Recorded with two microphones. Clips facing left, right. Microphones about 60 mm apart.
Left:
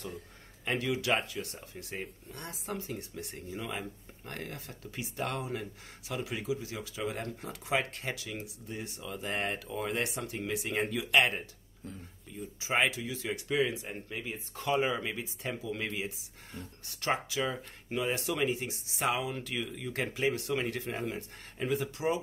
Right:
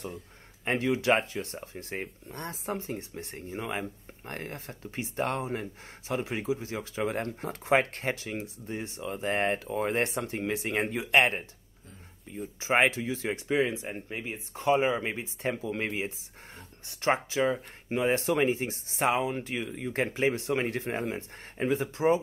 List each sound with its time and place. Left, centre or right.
0.7 s speech: right